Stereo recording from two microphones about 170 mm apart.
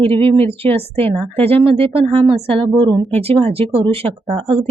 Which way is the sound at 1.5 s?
35° right (ahead or behind).